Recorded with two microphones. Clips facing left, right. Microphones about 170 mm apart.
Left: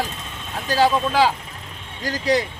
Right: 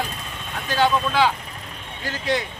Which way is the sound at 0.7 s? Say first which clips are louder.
Left 2 dB; 35° left (ahead or behind).